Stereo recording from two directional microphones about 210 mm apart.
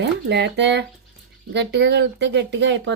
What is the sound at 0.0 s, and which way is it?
Speech, 55° right (ahead or behind).